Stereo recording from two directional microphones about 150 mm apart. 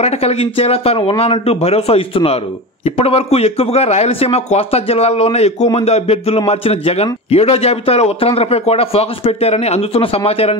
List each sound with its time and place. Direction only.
0.0 s a man's voice: 40° left (ahead or behind)